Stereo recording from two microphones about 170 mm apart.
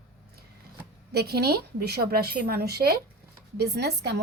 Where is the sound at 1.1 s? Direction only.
70° right (ahead or behind).